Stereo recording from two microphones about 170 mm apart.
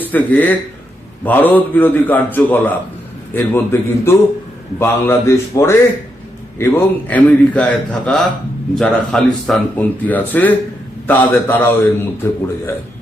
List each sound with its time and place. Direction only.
0.0 s a man's voice: 10° left (ahead or behind)